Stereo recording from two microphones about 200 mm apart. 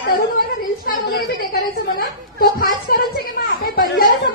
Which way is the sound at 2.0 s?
45° left (ahead or behind).